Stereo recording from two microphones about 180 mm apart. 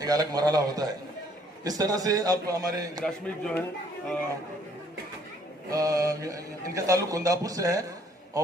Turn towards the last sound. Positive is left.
turn(degrees=-20)  # may be behind; listen again after turning